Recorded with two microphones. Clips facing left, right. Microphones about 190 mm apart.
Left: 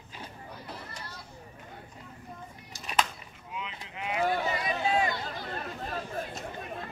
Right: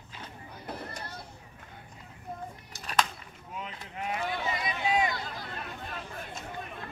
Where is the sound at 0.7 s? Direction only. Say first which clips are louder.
Right 8 dB; 50° right (ahead or behind).